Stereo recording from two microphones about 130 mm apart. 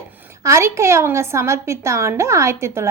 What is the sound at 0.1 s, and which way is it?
Speech, 15° right (ahead or behind).